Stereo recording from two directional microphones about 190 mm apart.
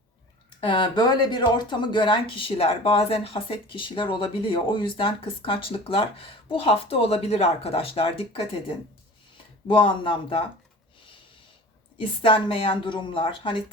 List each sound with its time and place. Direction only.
0.6 s speech: 25° left (ahead or behind)
11.9 s speech: 30° left (ahead or behind)